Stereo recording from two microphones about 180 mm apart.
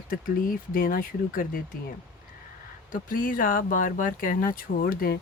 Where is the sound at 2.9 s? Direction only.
50° left (ahead or behind).